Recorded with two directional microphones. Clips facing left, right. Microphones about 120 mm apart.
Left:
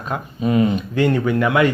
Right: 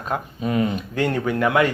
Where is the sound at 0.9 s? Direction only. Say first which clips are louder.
Left 4 dB; 40° right (ahead or behind).